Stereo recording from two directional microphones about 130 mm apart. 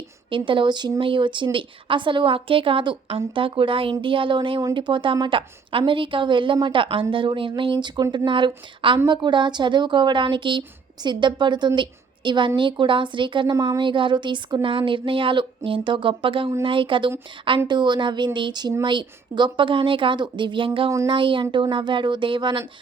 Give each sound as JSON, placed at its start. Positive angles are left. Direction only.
{"t": 0.3, "sound": "speech", "side_deg": -40}